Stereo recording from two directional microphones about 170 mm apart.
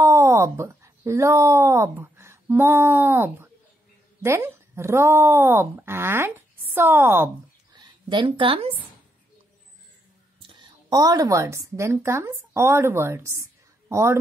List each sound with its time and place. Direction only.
0.0 s speech: 15° right (ahead or behind)
7.7 s a woman's voice: 25° right (ahead or behind)
10.4 s a woman's voice: 25° right (ahead or behind)